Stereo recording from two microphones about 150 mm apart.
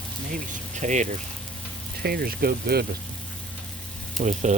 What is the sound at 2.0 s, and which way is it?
Speech, 90° right.